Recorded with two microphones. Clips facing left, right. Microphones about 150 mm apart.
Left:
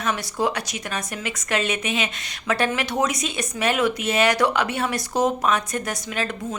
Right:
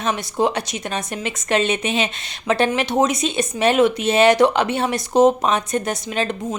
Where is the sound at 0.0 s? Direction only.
25° right (ahead or behind).